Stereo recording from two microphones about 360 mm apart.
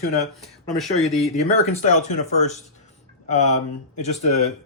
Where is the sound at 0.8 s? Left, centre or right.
Centre.